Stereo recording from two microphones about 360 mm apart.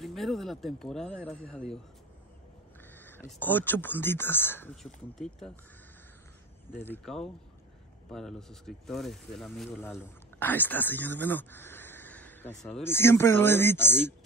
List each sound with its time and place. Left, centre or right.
0.0 s speech: centre
2.9 s speech: centre
6.7 s speech: centre